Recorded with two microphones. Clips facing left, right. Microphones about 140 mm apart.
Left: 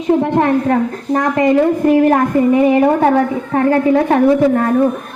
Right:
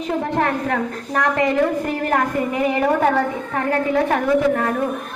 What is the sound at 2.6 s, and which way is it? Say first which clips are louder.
A woman's voice: left 6 dB; 30° left (ahead or behind).